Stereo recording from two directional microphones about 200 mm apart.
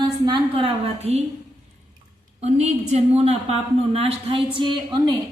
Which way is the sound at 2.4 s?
35° right (ahead or behind).